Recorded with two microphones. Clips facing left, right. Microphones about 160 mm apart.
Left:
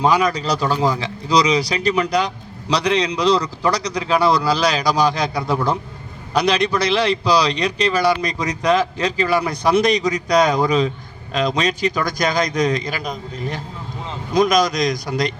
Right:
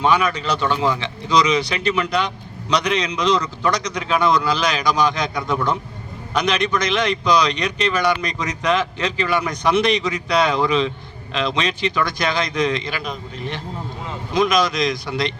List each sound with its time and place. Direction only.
0.0 s speech: 35° left (ahead or behind)